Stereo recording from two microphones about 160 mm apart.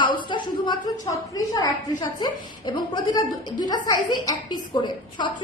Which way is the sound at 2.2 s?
25° left (ahead or behind).